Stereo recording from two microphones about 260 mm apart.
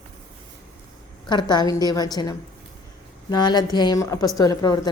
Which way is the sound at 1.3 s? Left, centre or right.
Centre.